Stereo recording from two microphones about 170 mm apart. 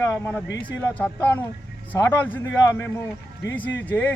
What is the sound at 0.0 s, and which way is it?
A man's voice, 15° left (ahead or behind).